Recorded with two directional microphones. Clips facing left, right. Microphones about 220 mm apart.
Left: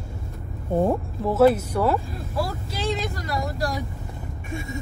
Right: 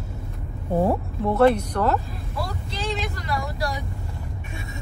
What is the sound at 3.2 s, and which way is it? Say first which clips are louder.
Speech: left 1 dB; 45° left (ahead or behind).